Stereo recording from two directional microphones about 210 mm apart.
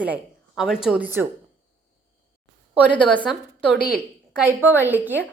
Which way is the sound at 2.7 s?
5° right (ahead or behind).